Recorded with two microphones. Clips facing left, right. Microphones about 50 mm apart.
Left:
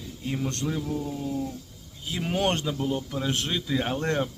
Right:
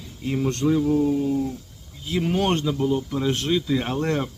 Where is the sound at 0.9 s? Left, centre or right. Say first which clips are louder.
Right 10 dB; right.